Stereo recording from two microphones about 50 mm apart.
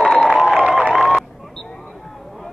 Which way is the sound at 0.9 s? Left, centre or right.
Centre.